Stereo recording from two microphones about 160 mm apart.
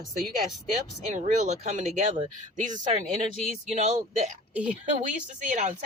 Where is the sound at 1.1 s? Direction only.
50° right (ahead or behind).